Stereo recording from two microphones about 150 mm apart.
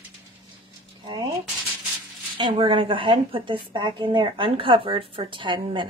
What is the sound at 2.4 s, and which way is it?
A woman's voice, 35° right (ahead or behind).